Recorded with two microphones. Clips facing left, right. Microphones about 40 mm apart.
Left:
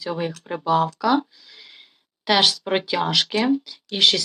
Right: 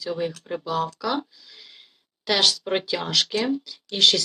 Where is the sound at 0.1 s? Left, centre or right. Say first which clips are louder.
Left 1 dB; left.